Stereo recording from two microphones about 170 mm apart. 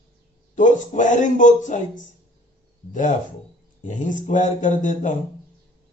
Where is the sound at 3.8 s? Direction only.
50° left (ahead or behind).